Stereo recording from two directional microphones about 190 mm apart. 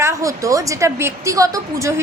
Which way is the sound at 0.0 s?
15° right (ahead or behind).